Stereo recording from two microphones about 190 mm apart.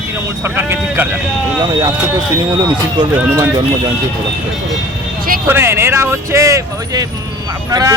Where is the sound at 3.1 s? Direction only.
10° right (ahead or behind).